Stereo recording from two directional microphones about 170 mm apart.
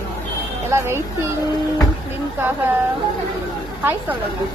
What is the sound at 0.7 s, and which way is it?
Speech, 15° right (ahead or behind).